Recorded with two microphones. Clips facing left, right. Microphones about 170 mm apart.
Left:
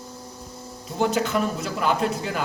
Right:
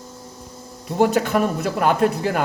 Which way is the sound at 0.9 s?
60° right (ahead or behind).